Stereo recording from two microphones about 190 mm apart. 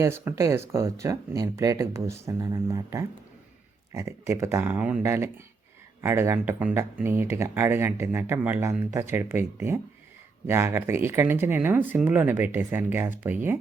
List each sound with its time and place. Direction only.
0.0 s speech: 15° right (ahead or behind)